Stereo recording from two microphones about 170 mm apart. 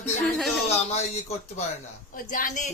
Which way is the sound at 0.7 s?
40° left (ahead or behind).